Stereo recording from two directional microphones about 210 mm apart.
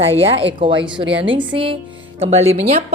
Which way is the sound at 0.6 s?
25° right (ahead or behind).